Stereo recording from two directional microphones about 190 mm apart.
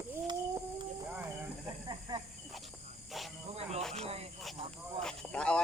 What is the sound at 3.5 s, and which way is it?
Music, 35° right (ahead or behind).